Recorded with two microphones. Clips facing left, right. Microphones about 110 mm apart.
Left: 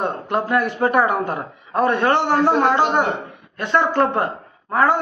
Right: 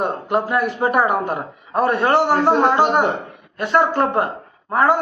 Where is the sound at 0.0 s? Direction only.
10° right (ahead or behind).